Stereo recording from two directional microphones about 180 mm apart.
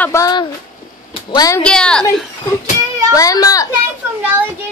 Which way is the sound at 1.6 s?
5° left (ahead or behind).